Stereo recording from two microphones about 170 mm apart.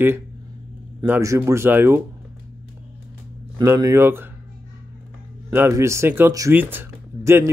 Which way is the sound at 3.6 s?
20° right (ahead or behind).